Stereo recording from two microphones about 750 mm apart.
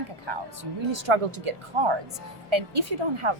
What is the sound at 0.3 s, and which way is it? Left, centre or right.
A woman's voice, right.